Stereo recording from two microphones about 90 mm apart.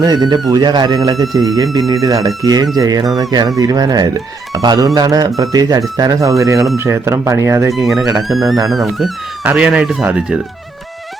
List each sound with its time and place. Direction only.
0.0 s speech: 50° right (ahead or behind); by 7.7 s 35° right (ahead or behind)
7.7 s speech: centre (ahead or behind)
9.4 s speech: 15° right (ahead or behind)